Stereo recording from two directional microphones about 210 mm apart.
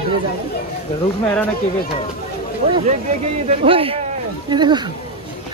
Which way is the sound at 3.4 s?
25° right (ahead or behind).